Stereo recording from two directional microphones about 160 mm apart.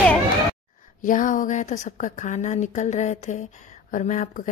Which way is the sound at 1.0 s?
55° left (ahead or behind).